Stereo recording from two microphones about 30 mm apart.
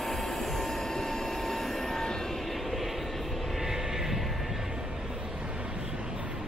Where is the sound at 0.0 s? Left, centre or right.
Centre.